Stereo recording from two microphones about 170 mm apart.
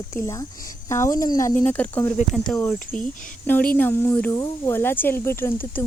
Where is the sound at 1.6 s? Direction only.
10° left (ahead or behind).